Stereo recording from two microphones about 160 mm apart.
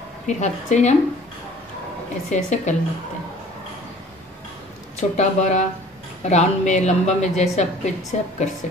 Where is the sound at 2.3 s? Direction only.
45° left (ahead or behind).